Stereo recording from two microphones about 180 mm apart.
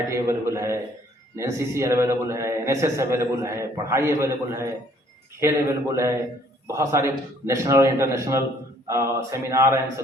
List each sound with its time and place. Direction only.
0.1 s a man's voice: 15° right (ahead or behind)